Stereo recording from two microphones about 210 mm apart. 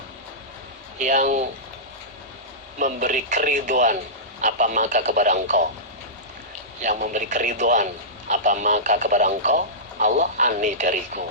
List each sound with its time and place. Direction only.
0.9 s speech: 35° right (ahead or behind)
2.7 s speech: 40° right (ahead or behind)
6.8 s speech: 35° right (ahead or behind)